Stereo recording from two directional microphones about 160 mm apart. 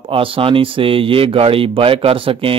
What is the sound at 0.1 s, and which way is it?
Speech, 35° right (ahead or behind).